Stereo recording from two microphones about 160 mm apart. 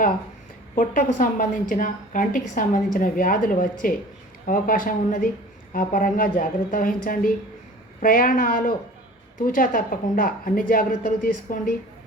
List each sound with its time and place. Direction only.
0.8 s a woman's voice: 55° left (ahead or behind)